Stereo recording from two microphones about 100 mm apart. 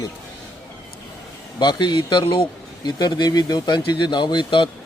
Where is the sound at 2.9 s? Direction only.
40° left (ahead or behind).